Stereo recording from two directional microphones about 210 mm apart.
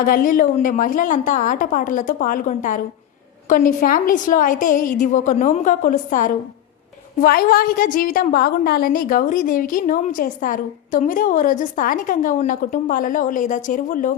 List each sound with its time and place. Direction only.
0.0 s a woman's voice: 40° left (ahead or behind)